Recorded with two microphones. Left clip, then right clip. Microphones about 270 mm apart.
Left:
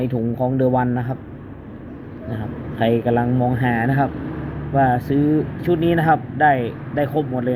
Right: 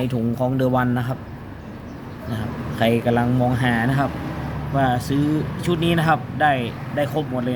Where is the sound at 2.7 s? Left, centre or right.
Centre.